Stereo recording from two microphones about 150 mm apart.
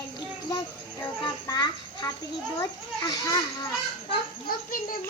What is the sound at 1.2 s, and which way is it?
Speech, 25° left (ahead or behind).